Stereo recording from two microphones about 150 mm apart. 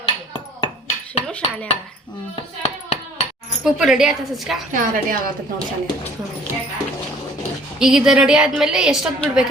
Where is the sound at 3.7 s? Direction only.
5° right (ahead or behind).